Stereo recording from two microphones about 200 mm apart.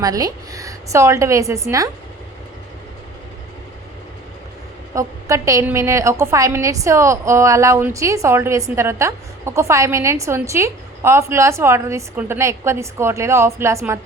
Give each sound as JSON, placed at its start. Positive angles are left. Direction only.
{"t": 0.0, "sound": "a woman's voice", "side_deg": -20}
{"t": 4.9, "sound": "a woman's voice", "side_deg": -15}